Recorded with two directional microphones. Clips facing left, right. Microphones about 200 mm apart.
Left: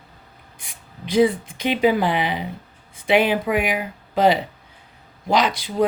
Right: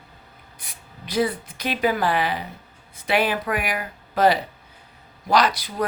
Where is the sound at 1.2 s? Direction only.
20° left (ahead or behind).